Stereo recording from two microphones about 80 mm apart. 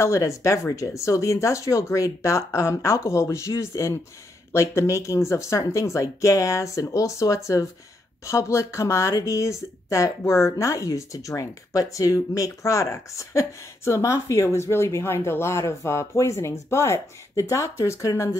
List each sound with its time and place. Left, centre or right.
0.0 s speech: left